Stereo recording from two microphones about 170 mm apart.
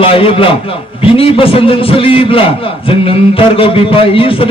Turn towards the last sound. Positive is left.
turn(degrees=30)  # may be behind; listen again after turning